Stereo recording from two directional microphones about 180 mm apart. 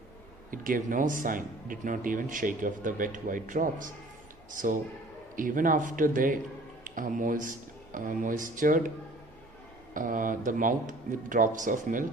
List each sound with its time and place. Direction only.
0.5 s speech: 50° right (ahead or behind)
9.9 s speech: 50° right (ahead or behind)